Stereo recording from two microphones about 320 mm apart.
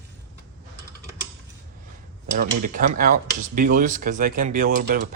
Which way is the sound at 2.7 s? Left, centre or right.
Right.